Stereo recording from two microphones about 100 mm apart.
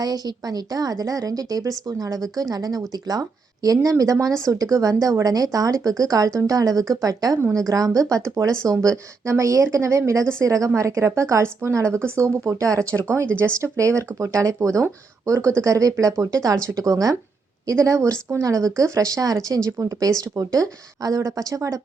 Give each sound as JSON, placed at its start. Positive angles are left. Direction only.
{"t": 0.0, "sound": "a woman's voice", "side_deg": -40}
{"t": 12.9, "sound": "speech", "side_deg": 15}
{"t": 13.4, "sound": "a woman's voice", "side_deg": -30}